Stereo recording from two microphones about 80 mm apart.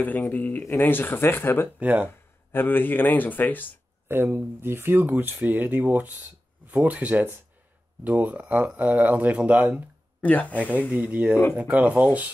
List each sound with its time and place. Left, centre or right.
0.3 s speech: left
1.8 s speech: centre
2.5 s speech: left
4.1 s speech: right
10.2 s speech: centre
10.5 s speech: centre